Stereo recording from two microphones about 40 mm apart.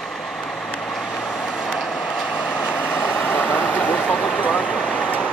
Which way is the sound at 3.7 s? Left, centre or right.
Left.